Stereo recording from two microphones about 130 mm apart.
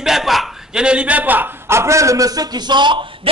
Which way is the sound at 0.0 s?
Centre (ahead or behind).